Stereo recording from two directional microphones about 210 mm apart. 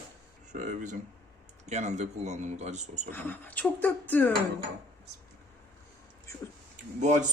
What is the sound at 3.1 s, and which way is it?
Speech, 10° left (ahead or behind).